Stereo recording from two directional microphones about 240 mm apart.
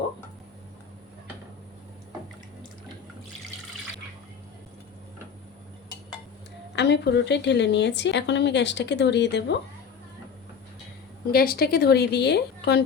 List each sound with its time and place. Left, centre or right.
6.7 s a woman's voice: left
11.3 s a woman's voice: left